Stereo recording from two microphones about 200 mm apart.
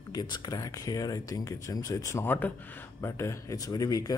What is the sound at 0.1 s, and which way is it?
Speech, 20° left (ahead or behind).